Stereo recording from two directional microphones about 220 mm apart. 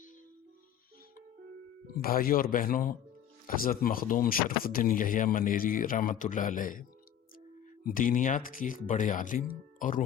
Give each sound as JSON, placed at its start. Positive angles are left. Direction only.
{"t": 2.0, "sound": "speech", "side_deg": 40}
{"t": 7.9, "sound": "speech", "side_deg": 40}